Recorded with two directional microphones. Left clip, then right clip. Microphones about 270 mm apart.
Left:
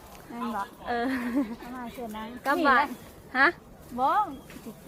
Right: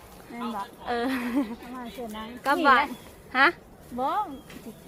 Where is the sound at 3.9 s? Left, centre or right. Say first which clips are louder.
Left 3 dB; centre.